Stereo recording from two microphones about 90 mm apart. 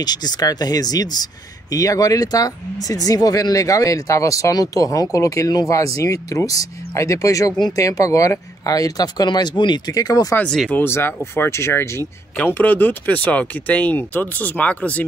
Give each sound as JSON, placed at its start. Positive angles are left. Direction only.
{"t": 0.0, "sound": "speech", "side_deg": 50}
{"t": 10.7, "sound": "speech", "side_deg": 25}